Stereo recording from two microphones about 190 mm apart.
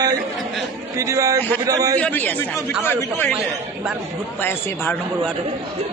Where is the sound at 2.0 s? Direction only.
10° left (ahead or behind).